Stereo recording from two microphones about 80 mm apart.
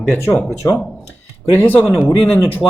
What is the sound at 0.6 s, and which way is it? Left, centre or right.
Speech, left.